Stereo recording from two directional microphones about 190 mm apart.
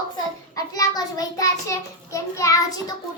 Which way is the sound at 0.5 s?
20° left (ahead or behind).